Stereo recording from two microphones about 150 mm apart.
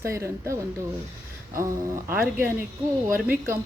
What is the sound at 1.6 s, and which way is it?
Speech, 15° right (ahead or behind).